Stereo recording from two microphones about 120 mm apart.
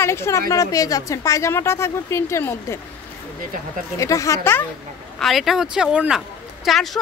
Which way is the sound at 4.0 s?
25° left (ahead or behind).